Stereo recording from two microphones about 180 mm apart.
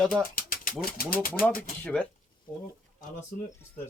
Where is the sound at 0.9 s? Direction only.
55° left (ahead or behind).